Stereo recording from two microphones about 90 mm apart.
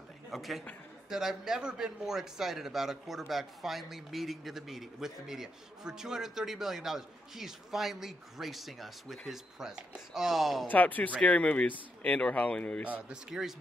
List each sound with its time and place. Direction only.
0.3 s speech: centre (ahead or behind)
10.7 s speech: 20° left (ahead or behind)
12.9 s speech: 5° right (ahead or behind)